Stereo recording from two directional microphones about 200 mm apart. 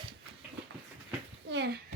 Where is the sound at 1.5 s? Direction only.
60° right (ahead or behind).